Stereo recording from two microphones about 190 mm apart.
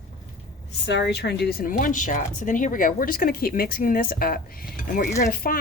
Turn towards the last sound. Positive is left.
turn(degrees=50)  # may be behind; listen again after turning